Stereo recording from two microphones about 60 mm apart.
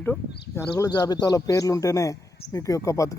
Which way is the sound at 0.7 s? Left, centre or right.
Left.